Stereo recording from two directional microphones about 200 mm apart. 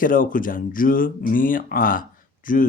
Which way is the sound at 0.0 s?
45° left (ahead or behind).